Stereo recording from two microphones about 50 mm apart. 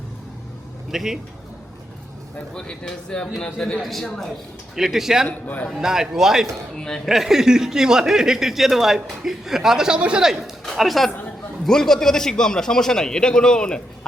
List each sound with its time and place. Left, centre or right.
0.9 s speech: centre
2.6 s a man's voice: centre
3.8 s a man's voice: centre
4.7 s speech: centre
6.7 s a man's voice: centre
7.0 s speech: centre
10.8 s a man's voice: centre